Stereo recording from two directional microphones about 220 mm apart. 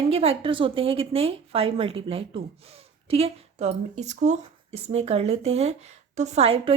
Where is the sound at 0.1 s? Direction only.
25° right (ahead or behind).